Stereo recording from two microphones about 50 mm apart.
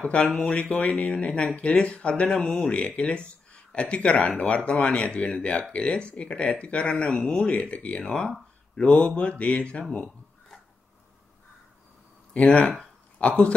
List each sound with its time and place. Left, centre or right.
0.0 s speech: left
2.2 s speech: centre
2.6 s speech: left
12.4 s speech: centre